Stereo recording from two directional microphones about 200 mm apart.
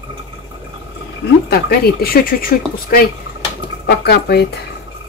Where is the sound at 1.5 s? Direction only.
50° left (ahead or behind).